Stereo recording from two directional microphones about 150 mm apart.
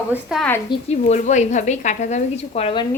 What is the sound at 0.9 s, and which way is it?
Speech, 50° left (ahead or behind).